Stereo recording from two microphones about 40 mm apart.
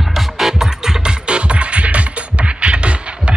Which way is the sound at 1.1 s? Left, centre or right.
Right.